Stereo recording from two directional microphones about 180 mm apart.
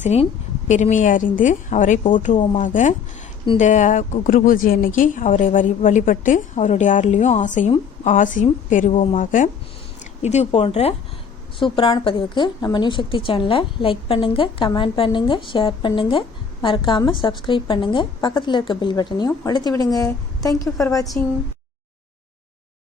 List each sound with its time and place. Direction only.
0.0 s a woman's voice: 35° left (ahead or behind)
2.3 s a woman's voice: 25° left (ahead or behind)
2.6 s a woman's voice: 45° left (ahead or behind); by 21.1 s 20° left (ahead or behind)